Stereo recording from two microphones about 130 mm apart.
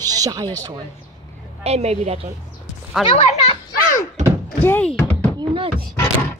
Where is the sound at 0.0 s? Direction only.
30° right (ahead or behind).